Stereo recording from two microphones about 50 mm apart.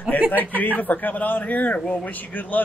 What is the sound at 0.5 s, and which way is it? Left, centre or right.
A man's voice, left.